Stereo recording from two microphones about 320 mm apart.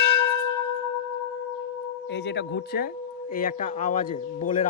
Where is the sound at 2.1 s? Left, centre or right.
Left.